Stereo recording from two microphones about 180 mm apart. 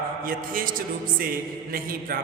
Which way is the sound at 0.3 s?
50° right (ahead or behind).